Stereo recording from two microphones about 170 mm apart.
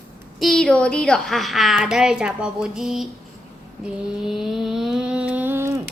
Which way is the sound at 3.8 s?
Centre (ahead or behind).